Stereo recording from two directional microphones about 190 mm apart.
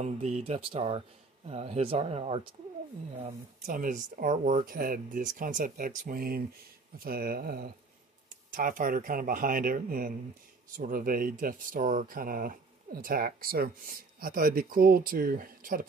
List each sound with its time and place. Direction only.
0.0 s speech: 35° right (ahead or behind)